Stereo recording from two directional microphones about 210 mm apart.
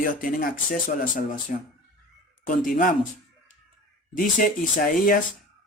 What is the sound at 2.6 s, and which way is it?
Speech, 40° left (ahead or behind).